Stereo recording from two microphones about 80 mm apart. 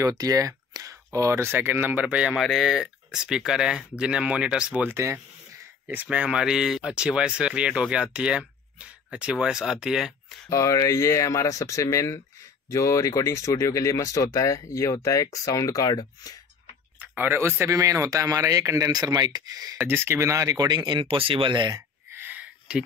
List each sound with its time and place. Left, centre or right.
0.0 s speech: right; by 2.3 s centre
2.3 s speech: centre
4.9 s speech: right
5.9 s speech: centre
10.5 s speech: left
17.0 s speech: right
17.7 s speech: right
19.8 s speech: right
22.1 s a sound: right